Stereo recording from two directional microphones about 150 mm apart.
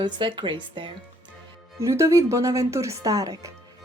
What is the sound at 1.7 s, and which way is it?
A woman's voice, 20° right (ahead or behind).